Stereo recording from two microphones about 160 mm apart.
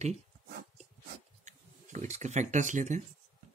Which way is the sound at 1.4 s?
45° right (ahead or behind).